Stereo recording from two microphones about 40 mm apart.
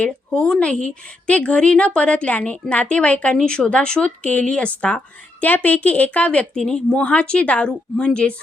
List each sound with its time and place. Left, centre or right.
0.0 s speech: left
1.3 s a woman's voice: left
5.4 s a woman's voice: left
6.7 s speech: left